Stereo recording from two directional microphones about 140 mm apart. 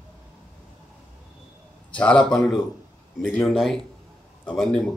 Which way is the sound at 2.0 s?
10° left (ahead or behind).